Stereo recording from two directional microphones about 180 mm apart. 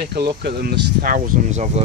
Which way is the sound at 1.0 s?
50° right (ahead or behind).